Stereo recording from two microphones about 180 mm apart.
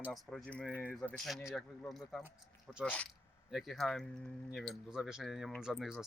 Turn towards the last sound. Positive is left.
turn(degrees=0)  # may be behind; listen again after turning